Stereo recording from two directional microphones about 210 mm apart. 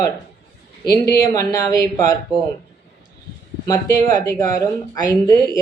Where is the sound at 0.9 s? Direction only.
15° left (ahead or behind).